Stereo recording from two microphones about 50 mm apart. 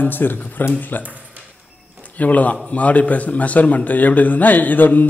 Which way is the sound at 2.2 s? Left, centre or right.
Left.